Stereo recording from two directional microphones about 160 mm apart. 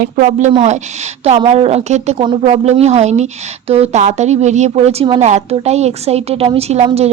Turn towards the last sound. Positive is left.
turn(degrees=-40)  # may be behind; listen again after turning